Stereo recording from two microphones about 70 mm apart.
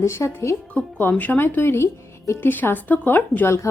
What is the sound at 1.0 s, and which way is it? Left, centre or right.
Speech, left.